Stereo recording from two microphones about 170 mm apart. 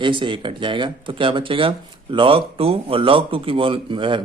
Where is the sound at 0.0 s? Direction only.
30° right (ahead or behind).